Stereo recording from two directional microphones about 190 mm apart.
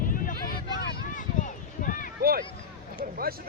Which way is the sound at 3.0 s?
50° right (ahead or behind).